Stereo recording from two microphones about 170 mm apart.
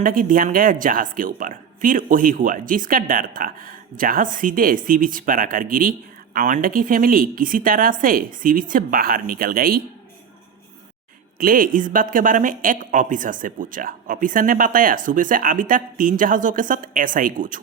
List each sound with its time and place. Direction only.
0.0 s a woman's voice: 55° right (ahead or behind)
11.3 s speech: 55° right (ahead or behind)